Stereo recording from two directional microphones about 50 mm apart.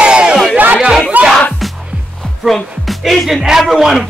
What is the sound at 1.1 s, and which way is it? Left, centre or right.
Music, right.